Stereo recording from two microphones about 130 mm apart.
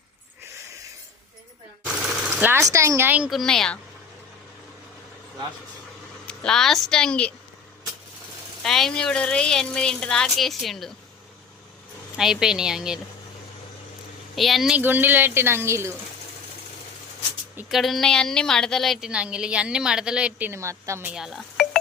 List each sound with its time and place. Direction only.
2.4 s a woman's voice: 20° right (ahead or behind)
3.2 s a woman's voice: centre (ahead or behind)
6.2 s a woman's voice: 5° left (ahead or behind)
8.6 s a woman's voice: 5° left (ahead or behind)
12.1 s a woman's voice: 5° right (ahead or behind)
14.3 s a woman's voice: centre (ahead or behind)
14.8 s speech: 15° right (ahead or behind)
17.7 s a woman's voice: centre (ahead or behind)
20.5 s a woman's voice: 20° right (ahead or behind)
21.1 s speech: 5° right (ahead or behind)